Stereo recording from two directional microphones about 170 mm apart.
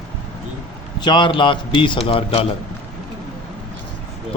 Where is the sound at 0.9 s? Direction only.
25° left (ahead or behind).